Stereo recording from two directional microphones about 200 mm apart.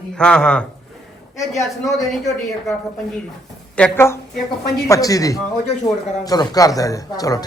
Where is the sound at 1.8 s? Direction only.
Centre (ahead or behind).